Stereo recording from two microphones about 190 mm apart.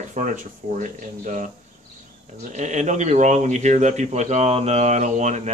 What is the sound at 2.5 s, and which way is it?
Speech, 40° right (ahead or behind).